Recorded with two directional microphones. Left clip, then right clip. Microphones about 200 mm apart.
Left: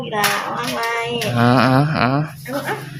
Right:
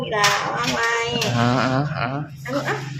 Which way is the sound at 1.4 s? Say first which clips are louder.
Left 8 dB; 35° left (ahead or behind).